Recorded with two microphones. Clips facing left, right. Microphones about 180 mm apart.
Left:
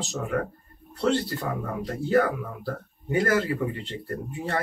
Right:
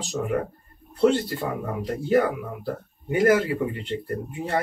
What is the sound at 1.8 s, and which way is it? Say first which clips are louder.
Speech: right 1 dB; 15° right (ahead or behind).